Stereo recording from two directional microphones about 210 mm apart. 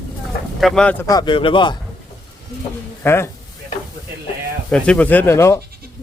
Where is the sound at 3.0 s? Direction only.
10° left (ahead or behind).